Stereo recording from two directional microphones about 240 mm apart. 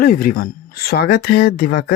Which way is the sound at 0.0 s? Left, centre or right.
Left.